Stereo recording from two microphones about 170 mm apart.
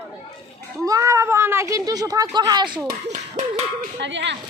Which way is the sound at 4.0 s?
90° right.